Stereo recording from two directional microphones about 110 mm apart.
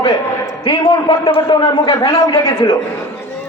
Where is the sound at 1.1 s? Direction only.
50° left (ahead or behind).